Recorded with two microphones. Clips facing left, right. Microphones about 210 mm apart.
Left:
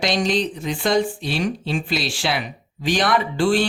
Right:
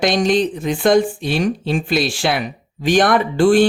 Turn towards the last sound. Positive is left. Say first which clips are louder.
# right 6 dB
turn(degrees=-50)  # may be behind; listen again after turning